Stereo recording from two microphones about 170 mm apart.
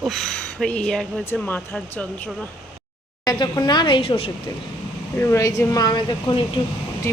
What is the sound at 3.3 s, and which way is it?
Speech, 25° left (ahead or behind).